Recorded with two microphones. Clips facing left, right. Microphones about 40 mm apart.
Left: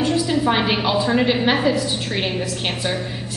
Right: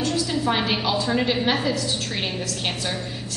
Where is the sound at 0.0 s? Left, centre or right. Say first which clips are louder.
Left 5 dB; centre.